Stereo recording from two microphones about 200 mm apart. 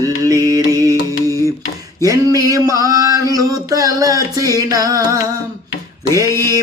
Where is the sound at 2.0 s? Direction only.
20° right (ahead or behind).